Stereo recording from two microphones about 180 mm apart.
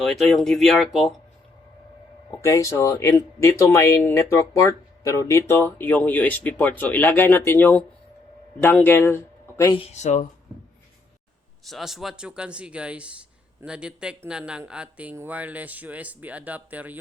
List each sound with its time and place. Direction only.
0.0 s speech: centre (ahead or behind)
2.4 s speech: 15° left (ahead or behind)
9.7 s speech: 35° left (ahead or behind)
11.6 s speech: centre (ahead or behind)